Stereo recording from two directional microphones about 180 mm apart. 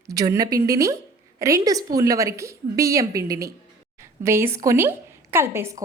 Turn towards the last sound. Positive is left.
turn(degrees=-15)  # may be behind; listen again after turning